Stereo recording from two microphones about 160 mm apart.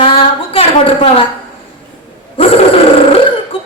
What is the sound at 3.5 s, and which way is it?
Cough, 35° left (ahead or behind).